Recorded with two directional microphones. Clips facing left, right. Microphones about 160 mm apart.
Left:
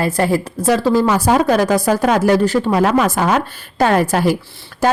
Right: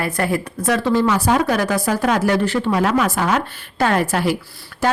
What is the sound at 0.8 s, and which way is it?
Speech, 40° left (ahead or behind).